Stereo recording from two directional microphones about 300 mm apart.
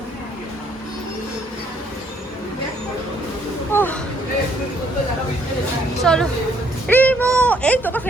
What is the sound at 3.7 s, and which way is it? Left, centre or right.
Speech, centre.